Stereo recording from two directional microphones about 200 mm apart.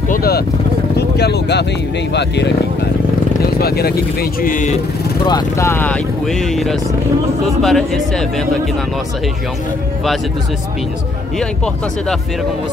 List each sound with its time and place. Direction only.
0.1 s vehicle: 50° left (ahead or behind)
0.9 s speech: 55° left (ahead or behind)
5.2 s speech: 15° left (ahead or behind)
11.3 s speech: 5° left (ahead or behind)